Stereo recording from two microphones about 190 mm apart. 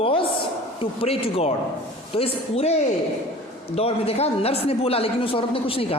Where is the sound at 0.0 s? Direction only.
30° left (ahead or behind).